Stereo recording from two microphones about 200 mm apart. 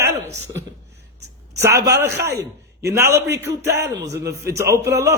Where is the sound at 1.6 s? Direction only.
15° right (ahead or behind).